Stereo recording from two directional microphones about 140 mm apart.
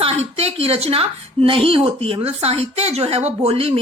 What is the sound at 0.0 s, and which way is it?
A woman's voice, 45° right (ahead or behind).